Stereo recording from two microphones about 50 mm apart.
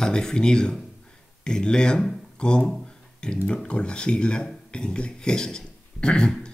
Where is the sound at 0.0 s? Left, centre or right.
Centre.